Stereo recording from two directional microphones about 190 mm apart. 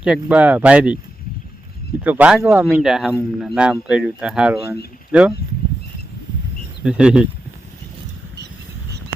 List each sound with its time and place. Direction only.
0.0 s speech: 5° right (ahead or behind)
2.0 s speech: 10° right (ahead or behind)
6.8 s speech: 5° right (ahead or behind)